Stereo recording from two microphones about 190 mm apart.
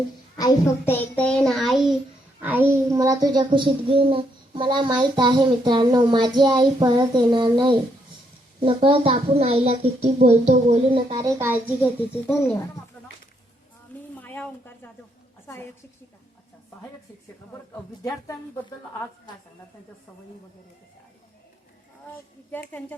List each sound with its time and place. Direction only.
0.3 s a child's voice: 15° left (ahead or behind); by 11.5 s 15° right (ahead or behind)
12.3 s a child's voice: 5° right (ahead or behind)
14.2 s a sound: 10° left (ahead or behind)
15.4 s a woman's voice: 15° left (ahead or behind)